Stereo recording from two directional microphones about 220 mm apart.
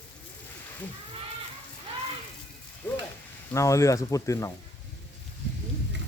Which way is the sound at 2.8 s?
10° left (ahead or behind).